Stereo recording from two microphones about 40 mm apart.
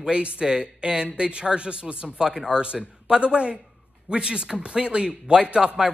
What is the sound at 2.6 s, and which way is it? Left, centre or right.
Speech, right.